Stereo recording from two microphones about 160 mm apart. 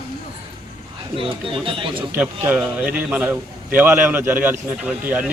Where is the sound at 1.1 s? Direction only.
60° right (ahead or behind).